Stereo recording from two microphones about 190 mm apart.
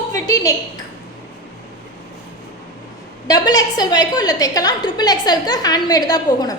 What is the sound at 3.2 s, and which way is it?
A woman's voice, 20° left (ahead or behind).